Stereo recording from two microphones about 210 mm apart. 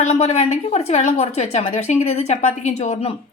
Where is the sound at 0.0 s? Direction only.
30° left (ahead or behind).